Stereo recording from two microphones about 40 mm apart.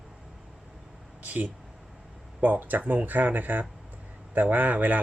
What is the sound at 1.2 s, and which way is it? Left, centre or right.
Speech, right.